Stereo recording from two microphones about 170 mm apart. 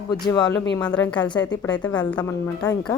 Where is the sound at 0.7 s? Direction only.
10° left (ahead or behind).